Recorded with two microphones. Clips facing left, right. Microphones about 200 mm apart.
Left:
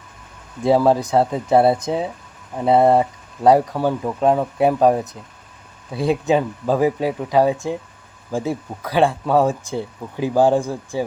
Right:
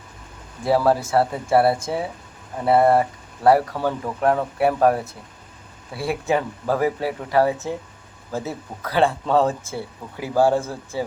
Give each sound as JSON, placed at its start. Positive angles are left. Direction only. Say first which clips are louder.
{"t": 0.6, "sound": "speech", "louder": "left 3 dB", "side_deg": 20}